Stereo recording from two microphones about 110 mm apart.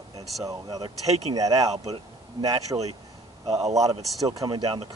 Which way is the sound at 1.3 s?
35° right (ahead or behind).